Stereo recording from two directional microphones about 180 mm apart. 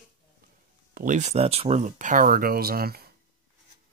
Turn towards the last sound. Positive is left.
turn(degrees=-60)  # may be behind; listen again after turning